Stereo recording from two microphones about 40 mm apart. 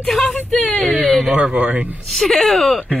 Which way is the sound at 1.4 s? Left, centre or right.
Right.